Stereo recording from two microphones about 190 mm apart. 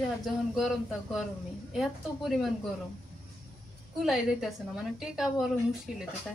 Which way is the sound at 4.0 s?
Centre (ahead or behind).